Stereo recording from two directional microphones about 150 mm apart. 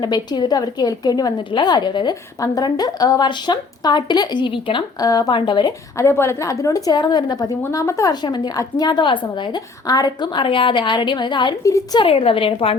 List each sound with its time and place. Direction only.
0.0 s a woman's voice: 30° left (ahead or behind)
6.0 s a woman's voice: 15° left (ahead or behind)
11.9 s a woman's voice: 40° left (ahead or behind)